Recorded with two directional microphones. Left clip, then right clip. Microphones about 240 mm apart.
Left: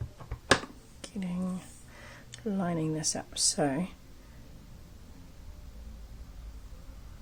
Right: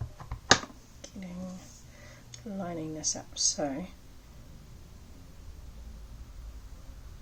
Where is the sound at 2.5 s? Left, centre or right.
Left.